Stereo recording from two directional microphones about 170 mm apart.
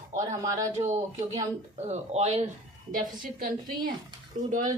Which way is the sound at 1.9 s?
40° right (ahead or behind).